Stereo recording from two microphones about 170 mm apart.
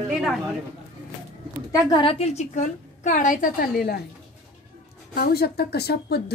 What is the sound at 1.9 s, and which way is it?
A woman's voice, 35° left (ahead or behind).